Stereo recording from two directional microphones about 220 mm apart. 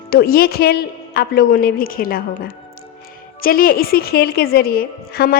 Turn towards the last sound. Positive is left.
turn(degrees=45)  # may be behind; listen again after turning